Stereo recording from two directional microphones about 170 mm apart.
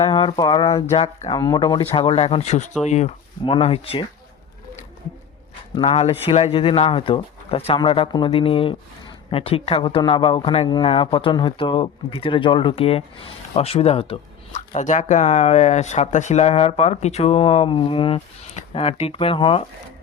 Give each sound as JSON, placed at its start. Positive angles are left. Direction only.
{"t": 0.0, "sound": "speech", "side_deg": 30}
{"t": 1.3, "sound": "speech", "side_deg": 25}
{"t": 5.8, "sound": "speech", "side_deg": 40}
{"t": 14.7, "sound": "speech", "side_deg": 45}